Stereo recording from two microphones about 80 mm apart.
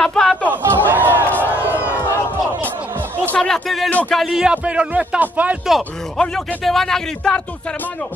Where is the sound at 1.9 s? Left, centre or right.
Left.